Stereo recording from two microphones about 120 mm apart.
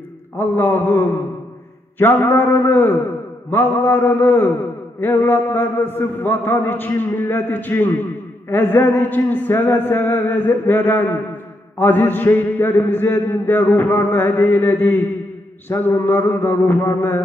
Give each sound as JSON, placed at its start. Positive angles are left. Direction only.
{"t": 0.4, "sound": "a man's voice", "side_deg": 15}